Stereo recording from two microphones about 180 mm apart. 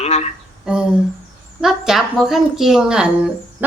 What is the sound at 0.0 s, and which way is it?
Speech, 35° left (ahead or behind).